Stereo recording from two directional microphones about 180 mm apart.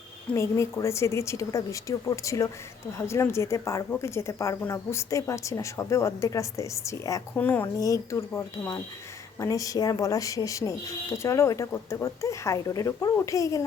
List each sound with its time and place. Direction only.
0.3 s speech: 15° left (ahead or behind)